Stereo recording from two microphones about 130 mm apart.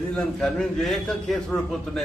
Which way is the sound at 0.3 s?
5° left (ahead or behind).